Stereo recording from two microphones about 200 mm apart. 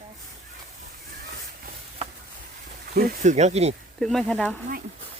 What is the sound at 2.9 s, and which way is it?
Speech, 40° right (ahead or behind).